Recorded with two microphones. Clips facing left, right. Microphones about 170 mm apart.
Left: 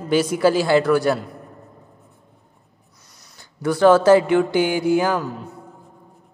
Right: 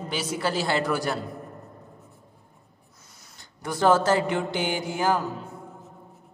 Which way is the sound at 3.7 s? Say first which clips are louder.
Left 8 dB; 65° left (ahead or behind).